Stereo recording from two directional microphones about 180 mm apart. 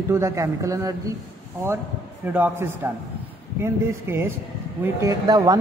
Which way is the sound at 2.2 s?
10° right (ahead or behind).